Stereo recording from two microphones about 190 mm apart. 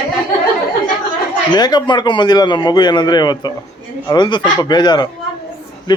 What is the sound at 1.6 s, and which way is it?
Speech, 20° left (ahead or behind).